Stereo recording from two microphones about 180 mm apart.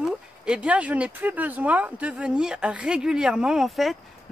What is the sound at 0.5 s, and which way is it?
Speech, 5° right (ahead or behind).